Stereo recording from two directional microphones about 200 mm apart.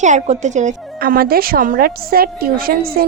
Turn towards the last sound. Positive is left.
turn(degrees=-45)  # may be behind; listen again after turning